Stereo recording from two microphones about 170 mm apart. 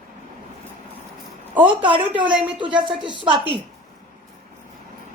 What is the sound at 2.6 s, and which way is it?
Speech, 30° right (ahead or behind).